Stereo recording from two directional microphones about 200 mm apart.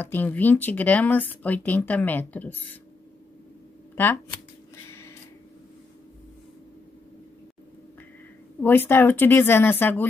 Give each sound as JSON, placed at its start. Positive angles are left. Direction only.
{"t": 0.0, "sound": "speech", "side_deg": 10}
{"t": 3.9, "sound": "speech", "side_deg": 10}
{"t": 8.5, "sound": "speech", "side_deg": 10}